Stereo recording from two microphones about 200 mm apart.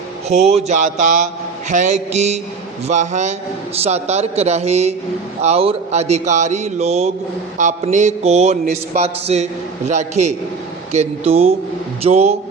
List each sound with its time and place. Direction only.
0.3 s a man's voice: 30° right (ahead or behind)